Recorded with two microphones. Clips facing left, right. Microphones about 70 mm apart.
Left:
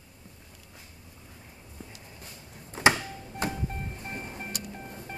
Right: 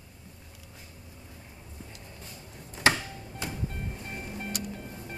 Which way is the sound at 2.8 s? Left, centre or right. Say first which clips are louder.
Left 2 dB; centre.